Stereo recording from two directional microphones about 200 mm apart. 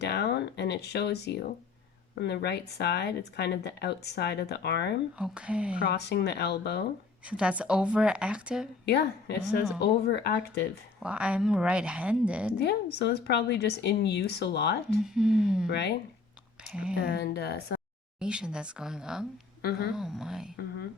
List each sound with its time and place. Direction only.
0.0 s speech: 55° left (ahead or behind)
5.1 s speech: 5° right (ahead or behind)
5.8 s speech: 55° left (ahead or behind)
7.3 s speech: 5° right (ahead or behind)
8.9 s speech: 55° left (ahead or behind)
11.0 s speech: 5° right (ahead or behind)
12.5 s speech: 55° left (ahead or behind)
15.0 s speech: centre (ahead or behind)
15.7 s speech: 55° left (ahead or behind)
17.0 s speech: 50° left (ahead or behind)
18.2 s speech: 5° right (ahead or behind)